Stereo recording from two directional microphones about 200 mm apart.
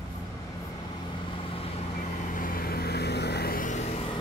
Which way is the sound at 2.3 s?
45° left (ahead or behind).